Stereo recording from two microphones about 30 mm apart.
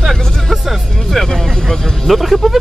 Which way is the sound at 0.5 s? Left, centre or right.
Centre.